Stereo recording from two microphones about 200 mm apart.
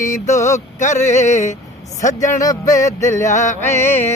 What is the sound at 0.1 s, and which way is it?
Music, 35° left (ahead or behind).